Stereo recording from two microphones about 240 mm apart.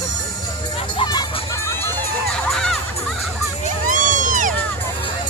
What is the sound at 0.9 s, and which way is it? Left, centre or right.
Music, centre.